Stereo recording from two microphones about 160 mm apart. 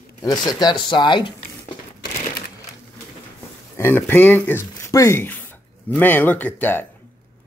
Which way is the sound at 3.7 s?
15° left (ahead or behind).